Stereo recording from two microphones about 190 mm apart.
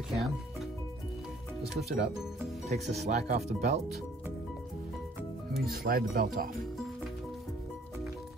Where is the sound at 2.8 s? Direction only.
35° right (ahead or behind).